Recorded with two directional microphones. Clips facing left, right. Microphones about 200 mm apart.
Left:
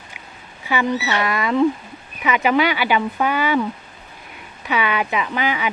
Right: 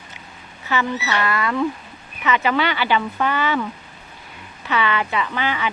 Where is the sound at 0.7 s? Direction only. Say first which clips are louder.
Left 2 dB; 15° left (ahead or behind).